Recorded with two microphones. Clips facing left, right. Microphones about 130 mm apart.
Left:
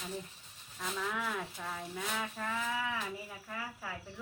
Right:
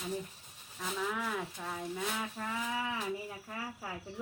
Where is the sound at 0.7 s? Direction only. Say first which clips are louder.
Right 1 dB; 5° right (ahead or behind).